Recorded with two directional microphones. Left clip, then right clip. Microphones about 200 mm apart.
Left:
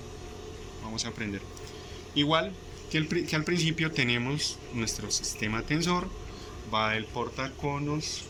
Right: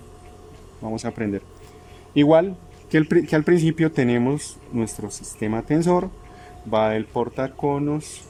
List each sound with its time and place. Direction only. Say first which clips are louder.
0.9 s speech: right 7 dB; 50° right (ahead or behind)